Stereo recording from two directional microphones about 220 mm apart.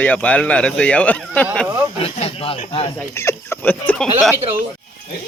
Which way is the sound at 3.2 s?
10° left (ahead or behind).